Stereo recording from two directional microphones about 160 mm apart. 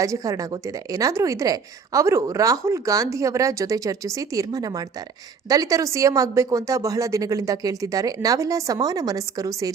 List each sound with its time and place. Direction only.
0.0 s a woman's voice: 20° right (ahead or behind)